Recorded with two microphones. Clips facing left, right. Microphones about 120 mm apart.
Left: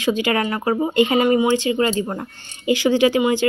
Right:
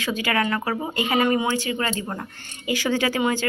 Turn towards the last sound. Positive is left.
turn(degrees=15)  # may be behind; listen again after turning